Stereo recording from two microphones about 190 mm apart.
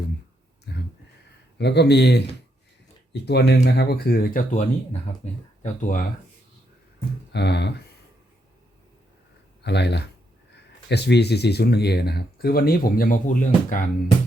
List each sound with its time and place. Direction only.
0.7 s a sound: 60° left (ahead or behind)
1.5 s speech: 60° left (ahead or behind); by 6.1 s 45° left (ahead or behind)
7.3 s speech: 65° left (ahead or behind)
9.6 s speech: 60° left (ahead or behind); by 13.8 s 40° left (ahead or behind)